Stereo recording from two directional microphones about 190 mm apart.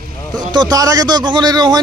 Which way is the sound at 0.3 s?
20° right (ahead or behind).